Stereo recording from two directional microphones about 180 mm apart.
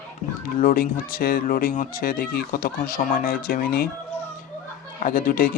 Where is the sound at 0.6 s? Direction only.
50° left (ahead or behind).